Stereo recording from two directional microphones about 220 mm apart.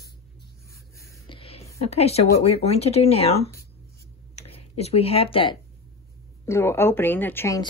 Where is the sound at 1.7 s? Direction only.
30° left (ahead or behind).